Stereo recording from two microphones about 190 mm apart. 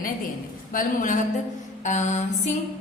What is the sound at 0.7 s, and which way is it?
A woman's voice, 45° left (ahead or behind).